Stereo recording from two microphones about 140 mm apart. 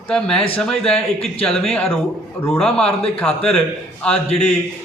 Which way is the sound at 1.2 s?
45° left (ahead or behind).